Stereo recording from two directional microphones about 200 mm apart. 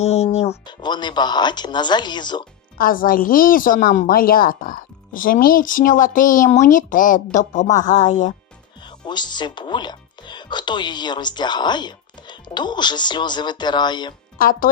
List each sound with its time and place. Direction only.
0.0 s speech: 35° left (ahead or behind)
2.7 s a woman's voice: 45° left (ahead or behind)
9.0 s speech: 20° left (ahead or behind)
14.3 s a woman's voice: 45° left (ahead or behind)